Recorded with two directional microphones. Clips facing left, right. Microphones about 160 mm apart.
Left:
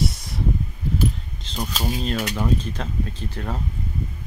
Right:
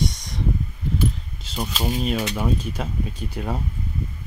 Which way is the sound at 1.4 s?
5° right (ahead or behind).